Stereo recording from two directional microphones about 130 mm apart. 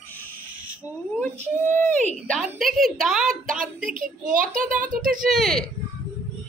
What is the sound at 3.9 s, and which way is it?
Speech, 90° right.